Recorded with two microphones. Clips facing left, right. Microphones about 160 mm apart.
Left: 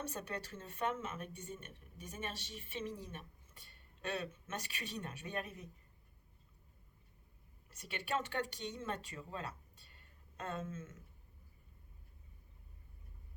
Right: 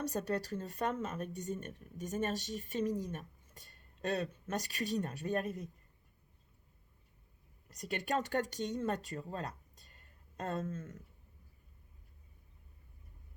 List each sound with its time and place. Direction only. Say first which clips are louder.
0.0 s speech: right 8 dB; 40° right (ahead or behind)
7.7 s speech: right 4 dB; 40° right (ahead or behind)